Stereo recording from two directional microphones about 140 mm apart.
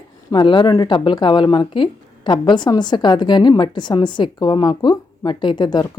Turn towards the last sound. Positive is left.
turn(degrees=30)  # may be behind; listen again after turning